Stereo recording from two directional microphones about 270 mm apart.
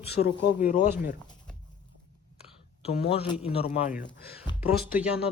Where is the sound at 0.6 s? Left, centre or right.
Left.